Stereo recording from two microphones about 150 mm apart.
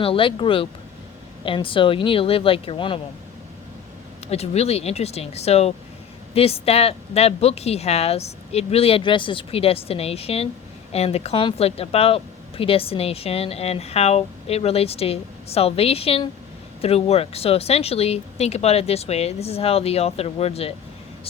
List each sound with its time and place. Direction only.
0.0 s speech: 35° left (ahead or behind)
4.3 s speech: 45° left (ahead or behind)